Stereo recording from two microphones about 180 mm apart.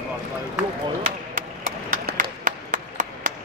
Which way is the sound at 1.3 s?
50° right (ahead or behind).